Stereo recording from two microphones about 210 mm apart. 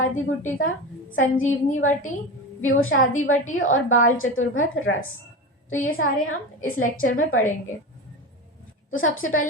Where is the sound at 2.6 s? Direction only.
75° left (ahead or behind).